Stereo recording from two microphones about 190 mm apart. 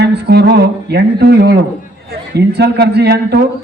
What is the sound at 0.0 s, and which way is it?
Speech, 60° right (ahead or behind).